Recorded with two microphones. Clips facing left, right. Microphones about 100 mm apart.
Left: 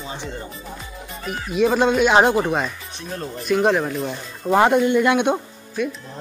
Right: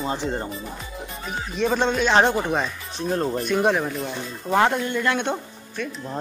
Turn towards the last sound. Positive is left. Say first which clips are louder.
# left 6 dB
turn(degrees=15)  # may be behind; listen again after turning